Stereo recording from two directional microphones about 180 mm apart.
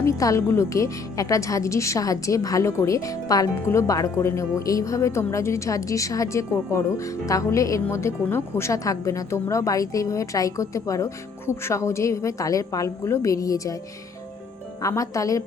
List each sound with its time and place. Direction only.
0.0 s a woman's voice: 20° left (ahead or behind)
14.8 s a woman's voice: 20° left (ahead or behind)